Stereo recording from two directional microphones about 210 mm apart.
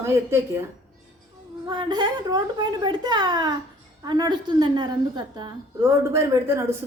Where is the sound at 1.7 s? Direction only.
20° right (ahead or behind).